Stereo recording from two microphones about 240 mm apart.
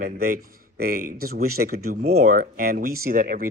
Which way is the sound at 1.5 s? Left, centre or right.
Right.